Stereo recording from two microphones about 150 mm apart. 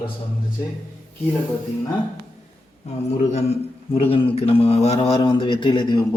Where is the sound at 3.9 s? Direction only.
40° left (ahead or behind).